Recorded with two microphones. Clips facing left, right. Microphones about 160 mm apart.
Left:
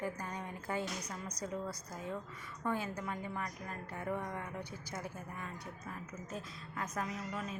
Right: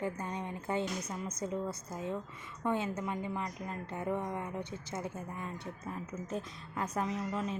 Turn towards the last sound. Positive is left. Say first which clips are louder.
# right 6 dB
turn(degrees=-25)  # may be behind; listen again after turning